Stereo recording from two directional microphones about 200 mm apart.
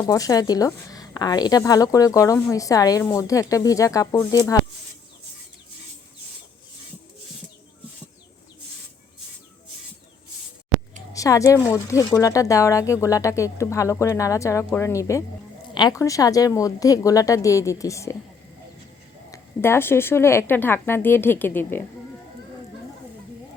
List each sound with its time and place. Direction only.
0.0 s a woman's voice: 20° left (ahead or behind)
11.1 s a woman's voice: 15° left (ahead or behind)
19.3 s a woman's voice: 10° left (ahead or behind)